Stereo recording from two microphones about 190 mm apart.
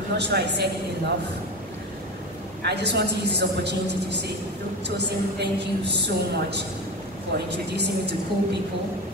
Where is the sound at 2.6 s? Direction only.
65° right (ahead or behind).